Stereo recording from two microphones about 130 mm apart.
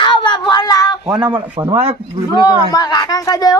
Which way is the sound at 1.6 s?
35° right (ahead or behind).